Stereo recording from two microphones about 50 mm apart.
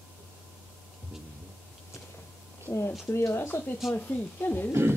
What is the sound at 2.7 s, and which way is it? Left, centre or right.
Speech, left.